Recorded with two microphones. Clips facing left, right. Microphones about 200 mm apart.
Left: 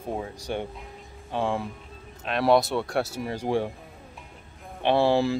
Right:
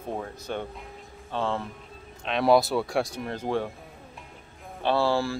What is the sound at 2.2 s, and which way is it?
Speech, centre (ahead or behind).